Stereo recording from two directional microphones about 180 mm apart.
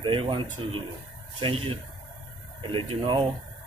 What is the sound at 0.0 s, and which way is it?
Speech, 30° right (ahead or behind).